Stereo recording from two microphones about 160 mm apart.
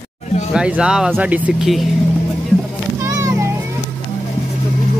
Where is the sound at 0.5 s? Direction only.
5° right (ahead or behind).